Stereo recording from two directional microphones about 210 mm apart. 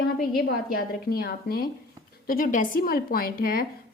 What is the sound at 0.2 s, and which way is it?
A woman's voice, 50° left (ahead or behind).